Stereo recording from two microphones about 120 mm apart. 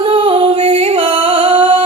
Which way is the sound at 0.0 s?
50° right (ahead or behind).